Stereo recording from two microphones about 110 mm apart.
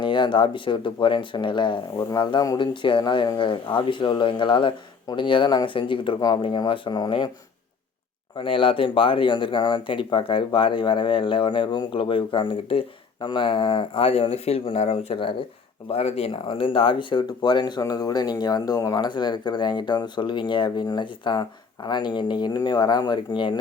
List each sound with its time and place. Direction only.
0.0 s speech: 45° left (ahead or behind)
2.0 s speech: 35° left (ahead or behind)
2.6 s speech: 50° left (ahead or behind)
8.4 s speech: 50° left (ahead or behind)
15.9 s speech: 70° left (ahead or behind); by 23.6 s 45° left (ahead or behind)